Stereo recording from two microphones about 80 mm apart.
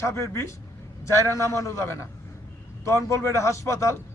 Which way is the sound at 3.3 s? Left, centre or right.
Left.